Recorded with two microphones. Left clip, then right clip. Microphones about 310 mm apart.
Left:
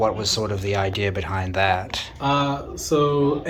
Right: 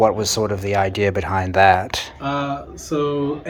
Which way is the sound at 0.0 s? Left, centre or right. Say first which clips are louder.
Right 5 dB; right.